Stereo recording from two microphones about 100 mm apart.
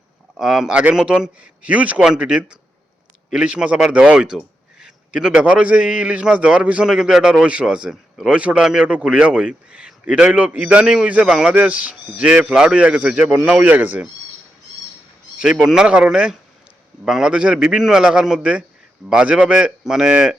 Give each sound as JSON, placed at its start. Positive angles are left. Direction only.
{"t": 0.3, "sound": "a man's voice", "side_deg": -5}
{"t": 15.4, "sound": "a man's voice", "side_deg": -5}